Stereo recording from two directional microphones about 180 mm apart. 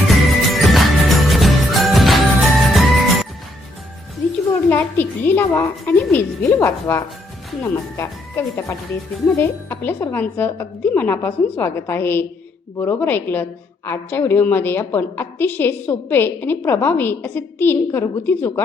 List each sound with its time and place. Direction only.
0.1 s music: centre (ahead or behind)
4.7 s a woman's voice: 10° left (ahead or behind)